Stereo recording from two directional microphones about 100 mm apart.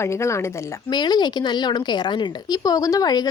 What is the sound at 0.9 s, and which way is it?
A woman's voice, 45° left (ahead or behind).